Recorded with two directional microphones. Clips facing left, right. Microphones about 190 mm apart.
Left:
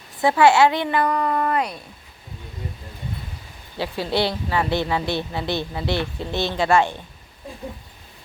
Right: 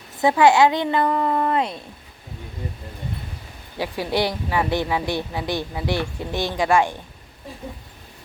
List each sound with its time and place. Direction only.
0.2 s speech: 15° right (ahead or behind)
3.8 s speech: 15° right (ahead or behind)